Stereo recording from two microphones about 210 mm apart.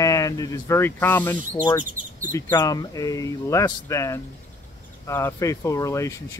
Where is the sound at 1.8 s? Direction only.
40° right (ahead or behind).